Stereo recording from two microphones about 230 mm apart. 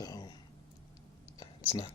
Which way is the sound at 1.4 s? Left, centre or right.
Centre.